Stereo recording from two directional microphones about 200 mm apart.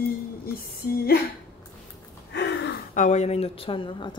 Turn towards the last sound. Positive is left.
turn(degrees=25)  # may be behind; listen again after turning